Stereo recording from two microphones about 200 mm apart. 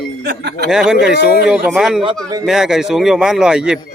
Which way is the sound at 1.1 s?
55° left (ahead or behind).